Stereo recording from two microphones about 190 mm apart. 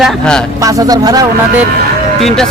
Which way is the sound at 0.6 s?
20° right (ahead or behind).